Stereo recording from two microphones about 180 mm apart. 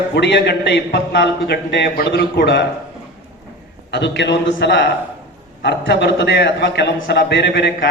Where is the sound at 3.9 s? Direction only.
75° left (ahead or behind).